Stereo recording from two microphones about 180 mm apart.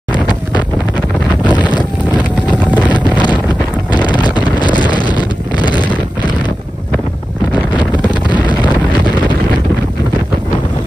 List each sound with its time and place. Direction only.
1.6 s wind noise: 25° left (ahead or behind)
2.9 s wind noise: 25° left (ahead or behind)